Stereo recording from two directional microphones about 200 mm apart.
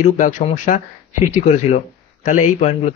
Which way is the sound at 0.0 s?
40° left (ahead or behind).